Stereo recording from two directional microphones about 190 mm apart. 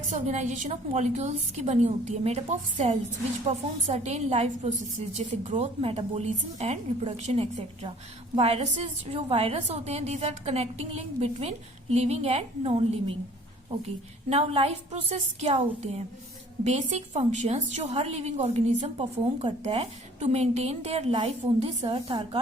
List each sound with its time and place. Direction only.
0.1 s a woman's voice: 40° right (ahead or behind)
14.3 s a woman's voice: 30° right (ahead or behind)